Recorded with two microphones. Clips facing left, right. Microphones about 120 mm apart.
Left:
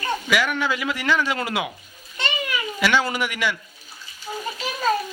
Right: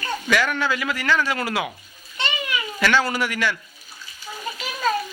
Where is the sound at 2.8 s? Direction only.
15° left (ahead or behind).